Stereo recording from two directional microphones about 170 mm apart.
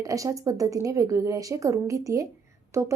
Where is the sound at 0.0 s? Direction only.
20° right (ahead or behind).